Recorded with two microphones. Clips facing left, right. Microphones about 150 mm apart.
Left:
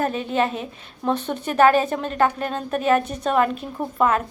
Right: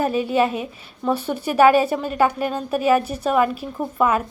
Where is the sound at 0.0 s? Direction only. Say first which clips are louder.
Right 3 dB; 5° right (ahead or behind).